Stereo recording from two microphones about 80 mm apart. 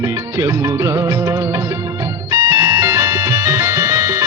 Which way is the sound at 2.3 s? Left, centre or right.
Right.